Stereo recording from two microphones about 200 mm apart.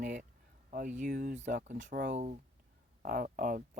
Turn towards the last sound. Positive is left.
turn(degrees=-45)  # may be behind; listen again after turning